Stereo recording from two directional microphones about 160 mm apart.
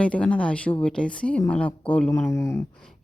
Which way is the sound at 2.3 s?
15° left (ahead or behind).